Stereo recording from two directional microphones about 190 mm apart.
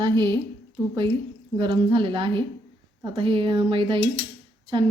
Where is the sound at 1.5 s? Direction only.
25° right (ahead or behind).